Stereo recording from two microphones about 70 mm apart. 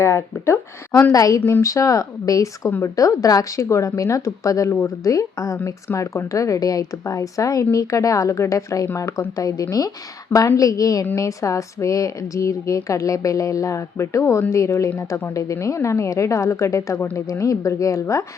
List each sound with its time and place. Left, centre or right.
0.0 s a woman's voice: left
1.1 s speech: left
2.6 s speech: left
2.9 s a woman's voice: left
4.7 s speech: left
5.1 s a woman's voice: left
7.0 s a woman's voice: left